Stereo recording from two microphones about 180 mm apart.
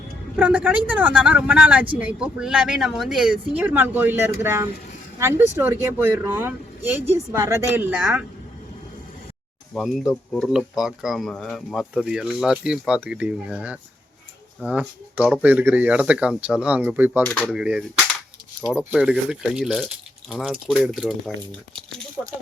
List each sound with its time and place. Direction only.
0.3 s speech: 10° right (ahead or behind)
9.7 s speech: centre (ahead or behind)
17.2 s speech: 10° left (ahead or behind)
17.5 s speech: 5° right (ahead or behind)